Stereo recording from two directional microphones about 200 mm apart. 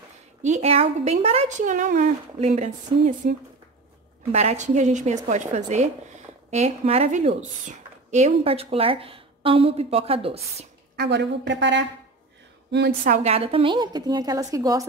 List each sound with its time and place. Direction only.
0.4 s speech: 35° right (ahead or behind)
4.3 s speech: 35° right (ahead or behind)
11.0 s a woman's voice: 60° right (ahead or behind)
13.1 s a woman's voice: 30° right (ahead or behind)